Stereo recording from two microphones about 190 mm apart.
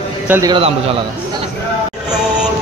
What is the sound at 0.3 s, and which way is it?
Speech, 20° right (ahead or behind).